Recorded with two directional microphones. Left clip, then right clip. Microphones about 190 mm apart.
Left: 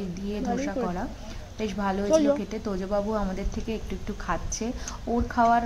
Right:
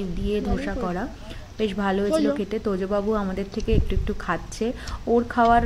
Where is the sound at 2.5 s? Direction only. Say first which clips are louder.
Right 5 dB; 15° right (ahead or behind).